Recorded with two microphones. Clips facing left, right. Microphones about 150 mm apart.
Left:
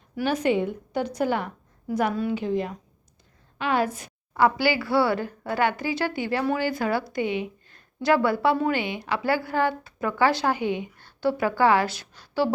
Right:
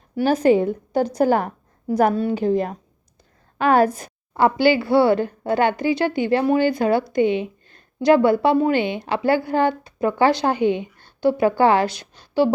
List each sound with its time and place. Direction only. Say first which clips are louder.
0.2 s a woman's voice: right 7 dB; 35° right (ahead or behind)
4.4 s a woman's voice: right 5 dB; 25° right (ahead or behind)